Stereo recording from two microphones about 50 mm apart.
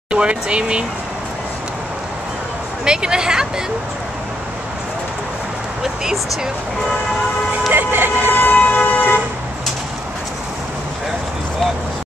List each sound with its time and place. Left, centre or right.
0.1 s speech: right
2.8 s speech: centre
7.7 s speech: right
8.3 s vehicle: left